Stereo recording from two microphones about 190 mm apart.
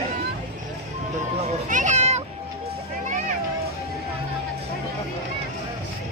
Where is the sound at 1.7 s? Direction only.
40° right (ahead or behind).